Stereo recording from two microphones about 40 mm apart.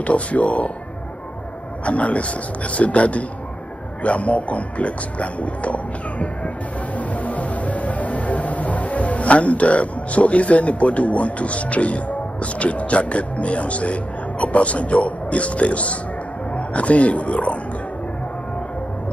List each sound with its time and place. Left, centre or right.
0.0 s speech: left
1.9 s speech: left
7.0 s music: left
16.5 s speech: left